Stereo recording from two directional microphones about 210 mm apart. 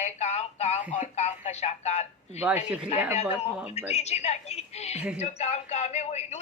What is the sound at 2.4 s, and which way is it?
Speech, 5° right (ahead or behind).